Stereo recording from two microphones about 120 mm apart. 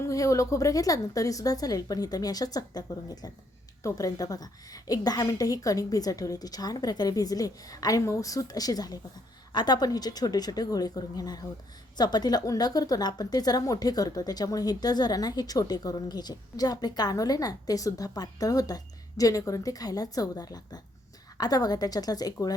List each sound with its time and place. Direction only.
0.0 s a woman's voice: 25° left (ahead or behind)